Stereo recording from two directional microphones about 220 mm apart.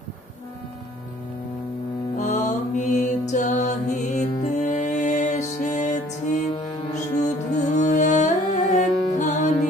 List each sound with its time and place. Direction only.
2.1 s music: 35° left (ahead or behind)